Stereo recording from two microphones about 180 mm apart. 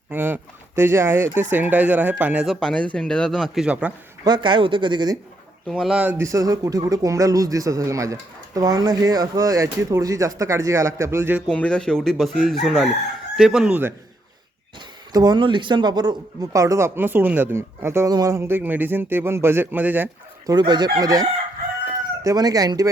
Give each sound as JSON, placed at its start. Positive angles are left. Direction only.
{"t": 0.1, "sound": "speech", "side_deg": -10}
{"t": 4.2, "sound": "speech", "side_deg": -25}
{"t": 5.6, "sound": "speech", "side_deg": 0}
{"t": 11.4, "sound": "speech", "side_deg": 5}
{"t": 15.1, "sound": "speech", "side_deg": -25}
{"t": 20.5, "sound": "speech", "side_deg": -25}